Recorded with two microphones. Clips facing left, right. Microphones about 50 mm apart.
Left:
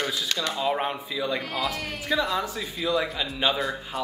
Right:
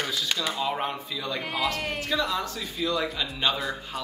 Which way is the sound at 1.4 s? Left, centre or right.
Centre.